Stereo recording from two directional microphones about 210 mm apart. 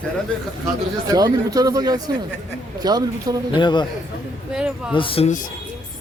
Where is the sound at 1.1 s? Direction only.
15° right (ahead or behind).